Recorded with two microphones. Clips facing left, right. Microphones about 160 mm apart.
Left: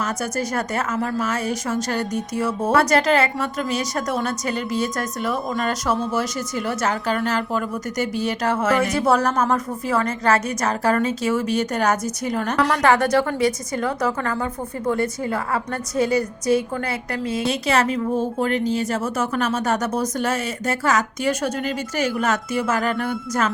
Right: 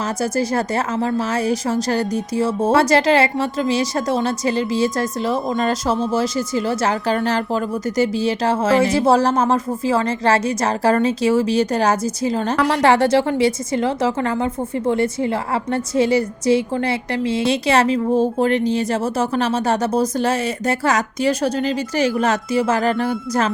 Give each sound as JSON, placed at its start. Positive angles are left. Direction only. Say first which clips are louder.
{"t": 0.0, "sound": "a woman's voice", "louder": "right 4 dB", "side_deg": -30}